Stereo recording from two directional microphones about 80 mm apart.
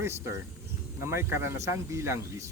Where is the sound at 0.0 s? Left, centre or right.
Right.